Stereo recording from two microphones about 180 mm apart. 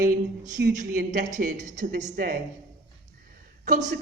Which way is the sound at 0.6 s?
70° right (ahead or behind).